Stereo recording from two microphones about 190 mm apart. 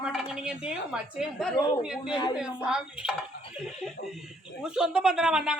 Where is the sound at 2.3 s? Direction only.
5° right (ahead or behind).